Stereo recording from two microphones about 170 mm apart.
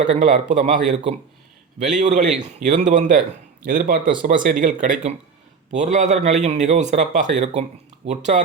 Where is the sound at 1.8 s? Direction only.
45° right (ahead or behind).